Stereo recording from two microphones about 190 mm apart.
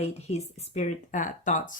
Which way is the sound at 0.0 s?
35° left (ahead or behind).